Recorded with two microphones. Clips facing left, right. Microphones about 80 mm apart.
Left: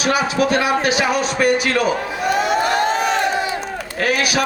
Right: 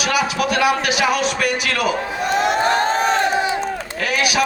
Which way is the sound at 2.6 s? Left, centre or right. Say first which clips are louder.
Even; right.